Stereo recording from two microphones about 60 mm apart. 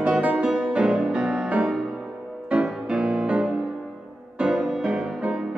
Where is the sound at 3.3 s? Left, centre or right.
Right.